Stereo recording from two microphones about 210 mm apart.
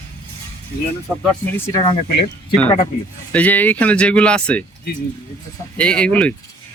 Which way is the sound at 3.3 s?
5° left (ahead or behind).